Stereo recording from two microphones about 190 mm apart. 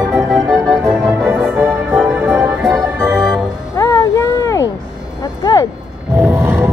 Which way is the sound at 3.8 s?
15° left (ahead or behind).